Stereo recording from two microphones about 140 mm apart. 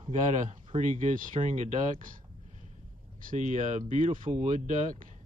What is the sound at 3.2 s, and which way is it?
A man's voice, 65° right (ahead or behind).